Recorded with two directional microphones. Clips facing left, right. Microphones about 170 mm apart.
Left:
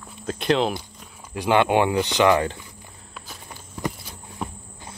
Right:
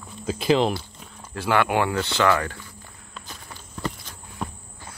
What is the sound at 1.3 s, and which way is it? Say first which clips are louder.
Speech: left 3 dB; 20° left (ahead or behind).